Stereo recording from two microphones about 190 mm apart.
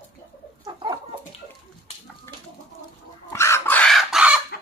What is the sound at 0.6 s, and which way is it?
Chicken, 20° right (ahead or behind).